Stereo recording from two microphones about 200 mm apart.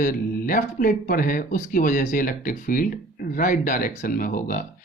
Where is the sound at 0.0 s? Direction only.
45° left (ahead or behind).